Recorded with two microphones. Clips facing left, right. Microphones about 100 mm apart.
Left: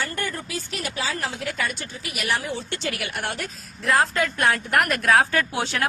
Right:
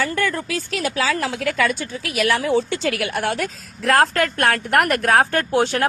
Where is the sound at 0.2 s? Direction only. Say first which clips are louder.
Right 7 dB; 90° right.